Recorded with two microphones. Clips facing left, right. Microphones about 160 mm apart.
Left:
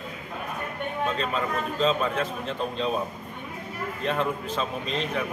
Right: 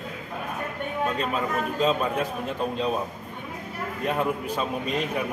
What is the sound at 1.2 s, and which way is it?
A man's voice, 10° right (ahead or behind).